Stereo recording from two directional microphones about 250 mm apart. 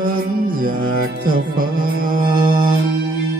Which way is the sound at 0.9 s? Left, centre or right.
Right.